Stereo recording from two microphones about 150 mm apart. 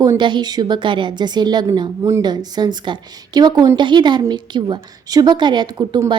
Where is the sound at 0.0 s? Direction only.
30° right (ahead or behind).